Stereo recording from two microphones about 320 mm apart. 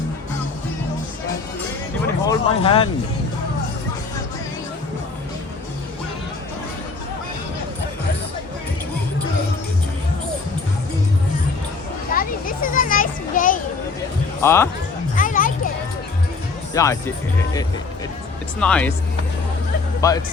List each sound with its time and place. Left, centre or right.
2.2 s speech: centre
12.1 s children playing: left
14.4 s speech: centre
15.1 s music: left
16.7 s speech: centre
18.6 s speech: centre
20.0 s speech: centre